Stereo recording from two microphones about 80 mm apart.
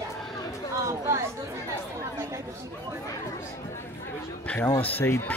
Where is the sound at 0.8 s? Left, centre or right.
Right.